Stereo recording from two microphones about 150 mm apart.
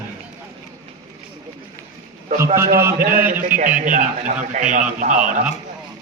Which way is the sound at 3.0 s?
75° right (ahead or behind).